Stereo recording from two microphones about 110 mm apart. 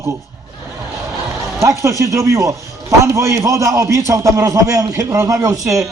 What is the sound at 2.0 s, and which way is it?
A man's voice, 25° right (ahead or behind).